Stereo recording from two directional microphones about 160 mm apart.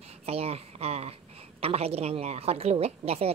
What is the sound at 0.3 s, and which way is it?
A woman's voice, 40° right (ahead or behind).